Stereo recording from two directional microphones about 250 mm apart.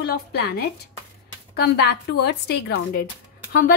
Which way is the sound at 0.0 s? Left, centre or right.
Left.